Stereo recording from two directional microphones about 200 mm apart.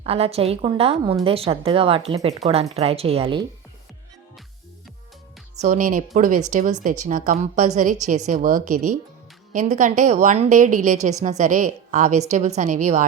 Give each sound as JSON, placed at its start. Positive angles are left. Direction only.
{"t": 0.0, "sound": "speech", "side_deg": -30}
{"t": 5.5, "sound": "a woman's voice", "side_deg": -40}